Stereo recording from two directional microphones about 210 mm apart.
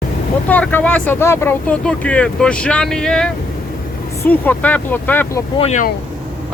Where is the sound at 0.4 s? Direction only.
5° left (ahead or behind).